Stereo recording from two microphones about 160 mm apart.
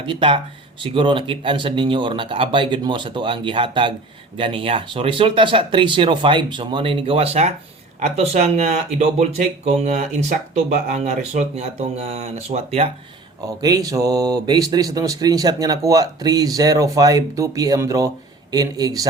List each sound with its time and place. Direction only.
0.0 s speech: 30° right (ahead or behind)
13.6 s speech: 25° right (ahead or behind)